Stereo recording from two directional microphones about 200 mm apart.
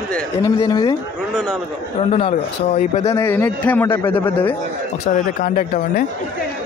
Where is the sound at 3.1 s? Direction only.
10° left (ahead or behind).